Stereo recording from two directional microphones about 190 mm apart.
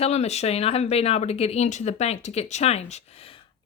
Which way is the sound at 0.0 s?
35° left (ahead or behind).